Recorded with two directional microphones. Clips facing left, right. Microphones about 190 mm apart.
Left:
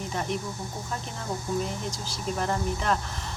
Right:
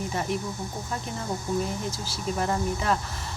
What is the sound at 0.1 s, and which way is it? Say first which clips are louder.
Speech: left 1 dB; 5° right (ahead or behind).